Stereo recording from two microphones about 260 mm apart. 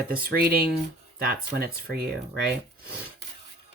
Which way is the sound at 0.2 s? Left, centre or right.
Right.